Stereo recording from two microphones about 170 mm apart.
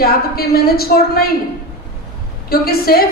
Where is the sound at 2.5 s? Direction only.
60° left (ahead or behind).